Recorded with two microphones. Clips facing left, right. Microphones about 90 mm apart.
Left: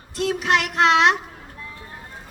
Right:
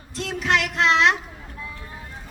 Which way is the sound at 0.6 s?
65° left (ahead or behind).